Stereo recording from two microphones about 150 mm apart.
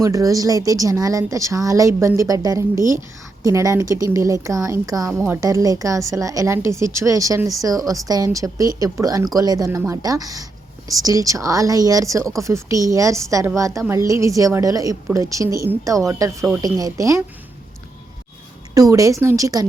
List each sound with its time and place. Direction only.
0.0 s a woman's voice: 20° right (ahead or behind)
18.7 s a woman's voice: 20° right (ahead or behind)